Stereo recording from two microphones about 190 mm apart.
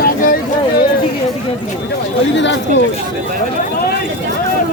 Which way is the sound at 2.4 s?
70° left (ahead or behind).